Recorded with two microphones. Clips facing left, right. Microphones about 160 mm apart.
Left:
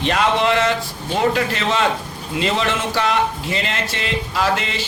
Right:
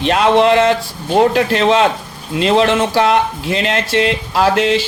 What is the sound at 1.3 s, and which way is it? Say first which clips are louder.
Speech: right 7 dB; 70° right (ahead or behind).